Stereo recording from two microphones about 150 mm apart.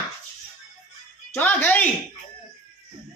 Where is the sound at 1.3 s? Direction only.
10° left (ahead or behind).